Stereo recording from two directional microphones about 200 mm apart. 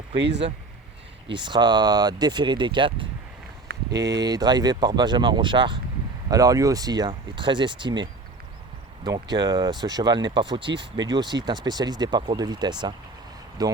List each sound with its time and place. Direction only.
0.2 s speech: 60° right (ahead or behind)
1.3 s speech: 25° right (ahead or behind)
3.7 s a sound: 50° right (ahead or behind)
4.2 s speech: 20° right (ahead or behind)
9.3 s speech: 20° right (ahead or behind)